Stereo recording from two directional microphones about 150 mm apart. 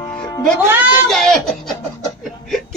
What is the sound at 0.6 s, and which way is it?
Speech, 15° right (ahead or behind).